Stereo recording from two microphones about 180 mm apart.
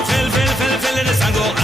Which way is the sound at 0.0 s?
Centre (ahead or behind).